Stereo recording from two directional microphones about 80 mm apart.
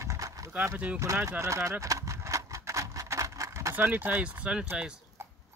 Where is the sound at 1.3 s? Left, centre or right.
Right.